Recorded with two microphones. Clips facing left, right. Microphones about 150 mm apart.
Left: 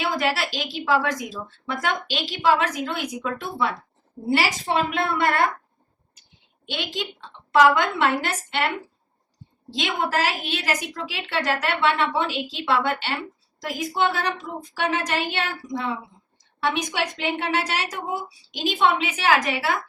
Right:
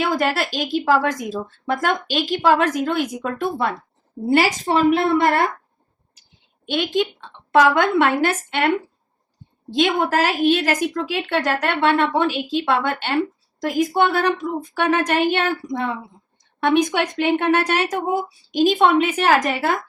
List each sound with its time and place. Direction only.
0.0 s a woman's voice: 50° right (ahead or behind)
6.7 s a woman's voice: 50° right (ahead or behind)